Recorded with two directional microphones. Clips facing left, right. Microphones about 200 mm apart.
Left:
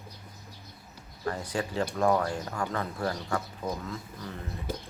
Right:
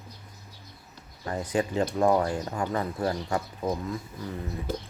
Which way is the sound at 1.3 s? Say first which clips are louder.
Right 7 dB; 20° right (ahead or behind).